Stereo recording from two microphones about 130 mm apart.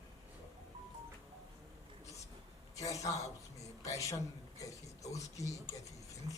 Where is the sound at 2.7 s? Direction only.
25° left (ahead or behind).